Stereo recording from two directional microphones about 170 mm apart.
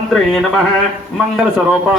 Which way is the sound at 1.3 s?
Centre (ahead or behind).